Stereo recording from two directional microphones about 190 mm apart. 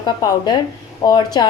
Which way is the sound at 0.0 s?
20° left (ahead or behind).